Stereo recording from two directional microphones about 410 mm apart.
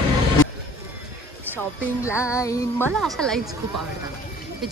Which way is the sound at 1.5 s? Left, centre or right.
Centre.